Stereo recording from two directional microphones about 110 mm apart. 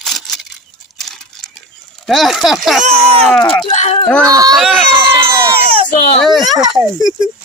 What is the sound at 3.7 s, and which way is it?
Speech, 90° left.